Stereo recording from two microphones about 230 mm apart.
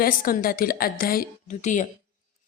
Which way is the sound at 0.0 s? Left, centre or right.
Left.